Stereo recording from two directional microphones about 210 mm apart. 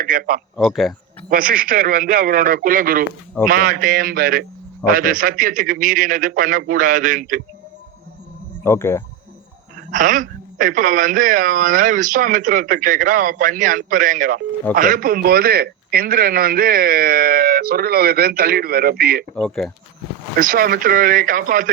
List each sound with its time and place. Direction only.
0.0 s a man's voice: 40° right (ahead or behind)
0.5 s speech: centre (ahead or behind)
1.3 s a woman's voice: 40° right (ahead or behind)
8.6 s speech: 10° left (ahead or behind)
9.9 s a woman's voice: 40° right (ahead or behind)
19.4 s speech: centre (ahead or behind)
20.4 s a woman's voice: 45° right (ahead or behind)